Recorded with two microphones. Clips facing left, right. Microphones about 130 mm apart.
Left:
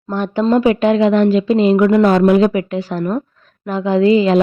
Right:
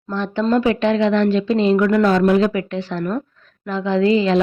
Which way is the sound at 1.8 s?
25° left (ahead or behind).